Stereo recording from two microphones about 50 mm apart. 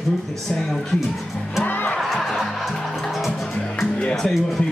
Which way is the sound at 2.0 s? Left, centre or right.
Centre.